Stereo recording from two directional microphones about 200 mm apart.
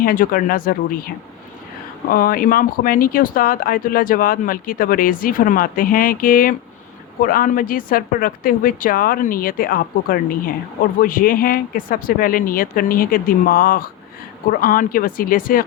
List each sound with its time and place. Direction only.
0.0 s speech: 45° left (ahead or behind)